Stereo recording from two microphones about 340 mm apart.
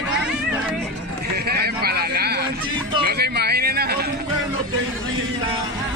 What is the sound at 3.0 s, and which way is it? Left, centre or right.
A man's voice, right.